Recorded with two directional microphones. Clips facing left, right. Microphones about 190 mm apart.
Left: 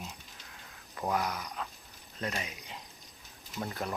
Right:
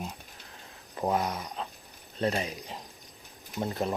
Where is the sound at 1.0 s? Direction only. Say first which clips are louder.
Right 4 dB; 25° right (ahead or behind).